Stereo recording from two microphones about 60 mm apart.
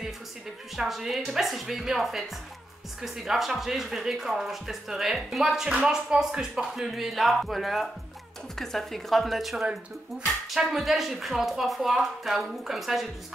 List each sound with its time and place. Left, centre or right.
0.7 s speech: centre